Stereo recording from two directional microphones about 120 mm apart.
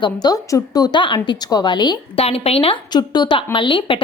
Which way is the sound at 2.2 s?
55° left (ahead or behind).